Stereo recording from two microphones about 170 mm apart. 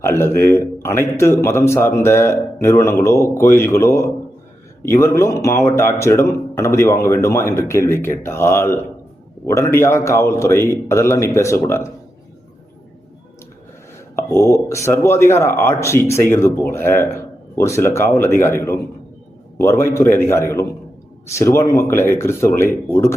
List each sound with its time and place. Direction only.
0.0 s speech: 15° left (ahead or behind)
14.2 s speech: 15° left (ahead or behind)